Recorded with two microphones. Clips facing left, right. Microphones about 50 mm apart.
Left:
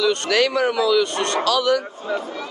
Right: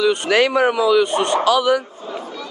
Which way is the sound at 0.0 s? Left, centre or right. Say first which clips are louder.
Right 3 dB; centre.